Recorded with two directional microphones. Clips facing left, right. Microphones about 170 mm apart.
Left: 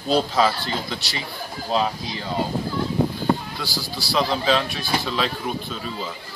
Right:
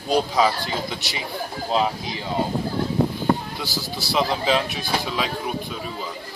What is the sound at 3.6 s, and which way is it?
Speech, 20° right (ahead or behind).